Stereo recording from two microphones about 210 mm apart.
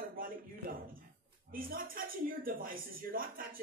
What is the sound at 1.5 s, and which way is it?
Speech, 45° right (ahead or behind).